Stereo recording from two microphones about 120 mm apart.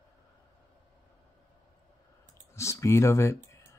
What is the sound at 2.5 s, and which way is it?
Speech, 25° left (ahead or behind).